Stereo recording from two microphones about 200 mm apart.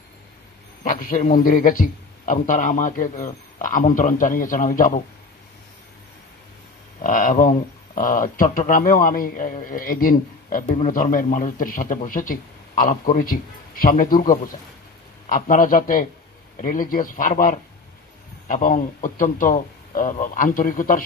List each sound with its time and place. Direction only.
0.8 s a man's voice: 45° left (ahead or behind)
7.0 s speech: 45° left (ahead or behind)